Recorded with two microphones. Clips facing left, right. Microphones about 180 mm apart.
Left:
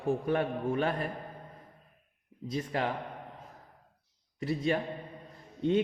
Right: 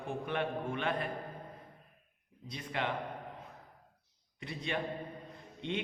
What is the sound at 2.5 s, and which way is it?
Speech, 40° left (ahead or behind).